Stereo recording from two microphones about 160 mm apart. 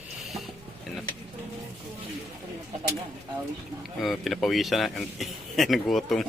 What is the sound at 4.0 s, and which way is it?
A man's voice, centre (ahead or behind).